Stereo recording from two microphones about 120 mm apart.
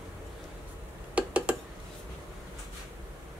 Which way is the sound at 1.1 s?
10° right (ahead or behind).